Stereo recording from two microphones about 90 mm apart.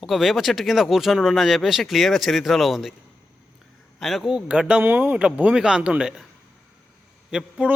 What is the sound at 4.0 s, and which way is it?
Speech, centre (ahead or behind).